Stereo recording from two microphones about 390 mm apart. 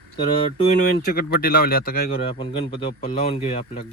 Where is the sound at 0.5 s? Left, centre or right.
Centre.